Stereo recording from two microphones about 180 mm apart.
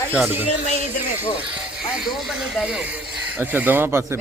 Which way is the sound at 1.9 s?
Centre (ahead or behind).